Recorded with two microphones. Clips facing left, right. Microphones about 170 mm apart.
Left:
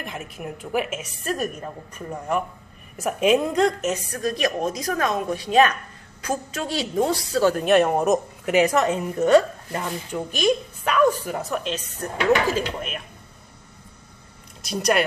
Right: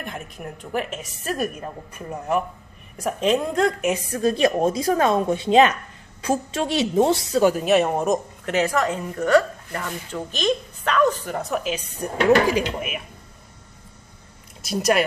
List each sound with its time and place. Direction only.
0.0 s a woman's voice: 5° left (ahead or behind)
1.2 s a woman's voice: 5° right (ahead or behind)
3.0 s a woman's voice: 5° left (ahead or behind)
4.1 s a woman's voice: 25° right (ahead or behind)
7.5 s a woman's voice: centre (ahead or behind)
8.5 s a woman's voice: 20° left (ahead or behind); by 13.0 s 10° right (ahead or behind)
14.6 s a woman's voice: 5° right (ahead or behind)